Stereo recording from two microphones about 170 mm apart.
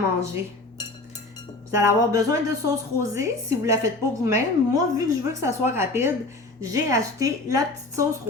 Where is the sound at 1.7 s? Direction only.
15° right (ahead or behind).